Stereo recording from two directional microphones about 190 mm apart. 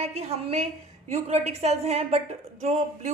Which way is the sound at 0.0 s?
35° right (ahead or behind).